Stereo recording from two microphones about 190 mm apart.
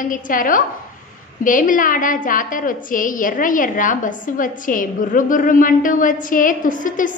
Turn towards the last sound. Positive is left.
turn(degrees=45)  # may be behind; listen again after turning